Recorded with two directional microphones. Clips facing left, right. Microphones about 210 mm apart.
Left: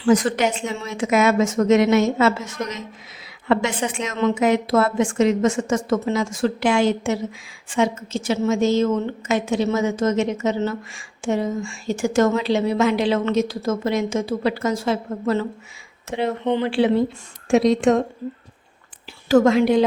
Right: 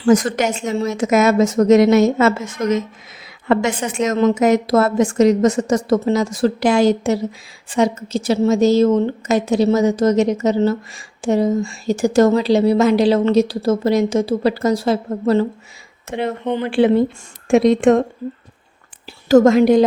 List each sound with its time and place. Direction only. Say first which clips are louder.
0.0 s a woman's voice: right 3 dB; 45° right (ahead or behind)
16.0 s a woman's voice: right 1 dB; 55° right (ahead or behind)
19.3 s a woman's voice: right 5 dB; 40° right (ahead or behind)